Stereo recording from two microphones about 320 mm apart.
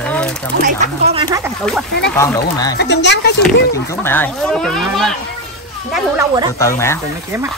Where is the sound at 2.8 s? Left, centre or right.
Left.